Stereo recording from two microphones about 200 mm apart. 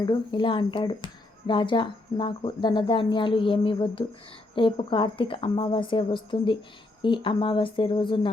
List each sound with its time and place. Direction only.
0.0 s speech: 20° left (ahead or behind)